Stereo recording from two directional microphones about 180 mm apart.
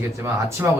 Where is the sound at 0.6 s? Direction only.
10° right (ahead or behind).